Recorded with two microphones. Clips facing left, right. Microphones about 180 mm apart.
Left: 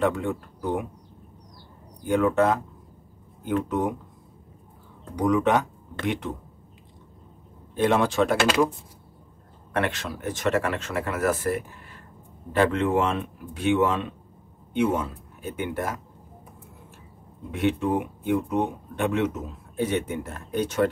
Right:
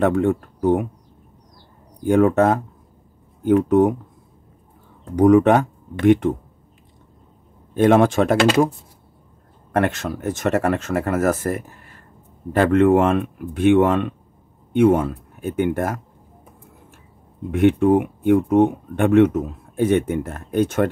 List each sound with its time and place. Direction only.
0.0 s speech: 50° right (ahead or behind)
2.0 s speech: 45° right (ahead or behind)
5.1 s speech: 50° right (ahead or behind)
7.7 s speech: 50° right (ahead or behind)
9.7 s speech: 45° right (ahead or behind)
17.5 s speech: 50° right (ahead or behind)